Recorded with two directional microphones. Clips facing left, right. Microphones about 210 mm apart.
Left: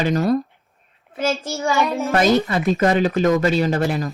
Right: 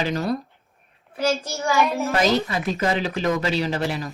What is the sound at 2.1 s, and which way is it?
Speech, 50° left (ahead or behind).